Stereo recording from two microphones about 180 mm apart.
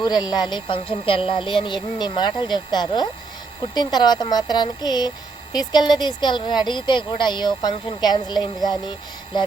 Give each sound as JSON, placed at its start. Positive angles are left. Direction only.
{"t": 0.0, "sound": "speech", "side_deg": 25}